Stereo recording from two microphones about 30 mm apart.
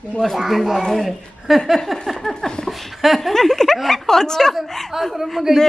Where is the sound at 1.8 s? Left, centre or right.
Centre.